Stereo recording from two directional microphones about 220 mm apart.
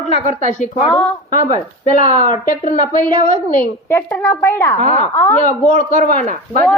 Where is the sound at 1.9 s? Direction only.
35° left (ahead or behind).